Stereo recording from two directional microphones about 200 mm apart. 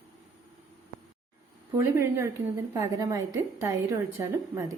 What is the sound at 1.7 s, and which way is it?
A woman's voice, 15° right (ahead or behind).